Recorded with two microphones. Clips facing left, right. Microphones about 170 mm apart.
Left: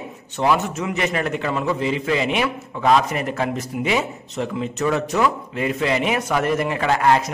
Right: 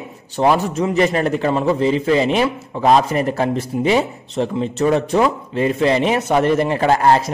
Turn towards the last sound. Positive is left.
turn(degrees=-35)  # may be behind; listen again after turning